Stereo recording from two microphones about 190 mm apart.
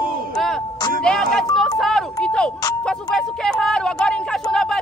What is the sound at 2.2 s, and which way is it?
Speech, 5° left (ahead or behind).